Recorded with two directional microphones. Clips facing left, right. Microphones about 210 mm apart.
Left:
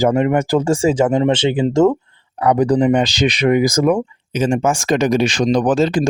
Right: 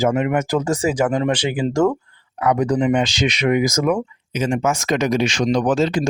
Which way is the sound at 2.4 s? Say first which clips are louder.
Left 4 dB; 35° left (ahead or behind).